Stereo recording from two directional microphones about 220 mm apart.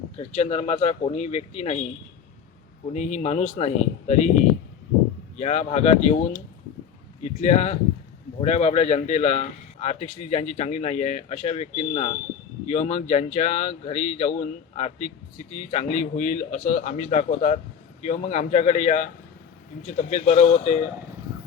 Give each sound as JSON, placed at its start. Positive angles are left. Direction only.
{"t": 0.2, "sound": "speech", "side_deg": 30}
{"t": 2.9, "sound": "a man's voice", "side_deg": 35}
{"t": 5.4, "sound": "a man's voice", "side_deg": 30}
{"t": 7.4, "sound": "a man's voice", "side_deg": 30}